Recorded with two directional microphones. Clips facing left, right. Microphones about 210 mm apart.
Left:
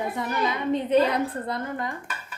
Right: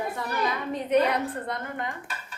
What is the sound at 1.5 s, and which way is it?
Dishes, 35° left (ahead or behind).